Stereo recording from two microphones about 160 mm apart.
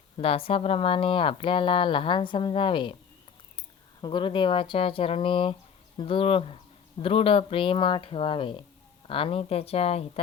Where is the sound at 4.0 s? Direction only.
30° left (ahead or behind).